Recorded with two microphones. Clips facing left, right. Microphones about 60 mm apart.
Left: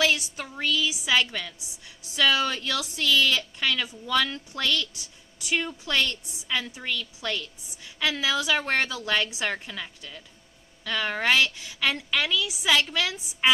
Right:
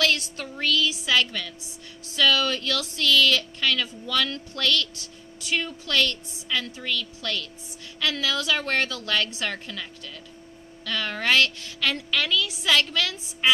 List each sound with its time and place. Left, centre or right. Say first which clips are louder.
0.0 s speech: even; centre